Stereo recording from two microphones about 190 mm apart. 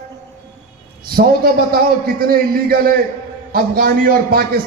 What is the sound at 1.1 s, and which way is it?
A man's voice, 50° right (ahead or behind).